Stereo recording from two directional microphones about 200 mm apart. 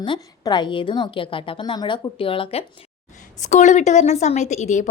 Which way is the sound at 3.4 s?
35° left (ahead or behind).